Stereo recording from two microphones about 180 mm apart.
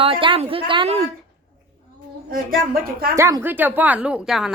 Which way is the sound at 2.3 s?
55° right (ahead or behind).